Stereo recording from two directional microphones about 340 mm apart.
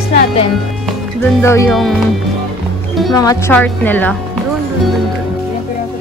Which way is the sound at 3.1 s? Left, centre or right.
Centre.